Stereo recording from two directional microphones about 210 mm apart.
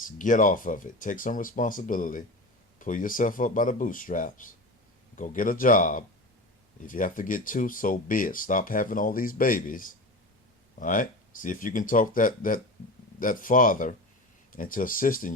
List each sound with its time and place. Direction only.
0.2 s speech: 40° left (ahead or behind)